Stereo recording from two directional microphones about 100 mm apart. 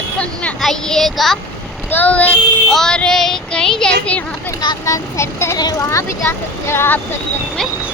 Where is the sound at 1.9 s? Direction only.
15° left (ahead or behind).